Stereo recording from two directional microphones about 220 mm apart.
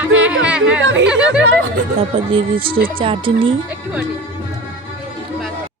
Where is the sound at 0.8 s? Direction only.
55° right (ahead or behind).